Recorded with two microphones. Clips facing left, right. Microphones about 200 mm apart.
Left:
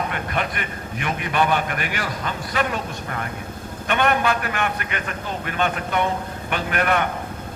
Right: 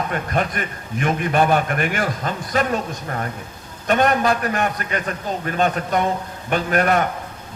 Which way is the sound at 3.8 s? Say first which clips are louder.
Right 3 dB; 40° right (ahead or behind).